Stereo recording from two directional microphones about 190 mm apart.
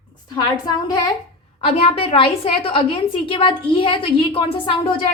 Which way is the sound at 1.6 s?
30° left (ahead or behind).